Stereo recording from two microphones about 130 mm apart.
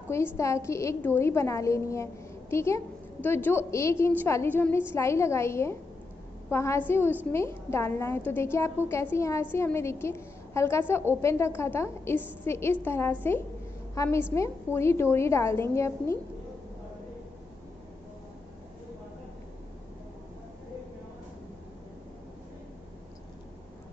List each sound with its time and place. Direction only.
0.4 s a woman's voice: 20° left (ahead or behind)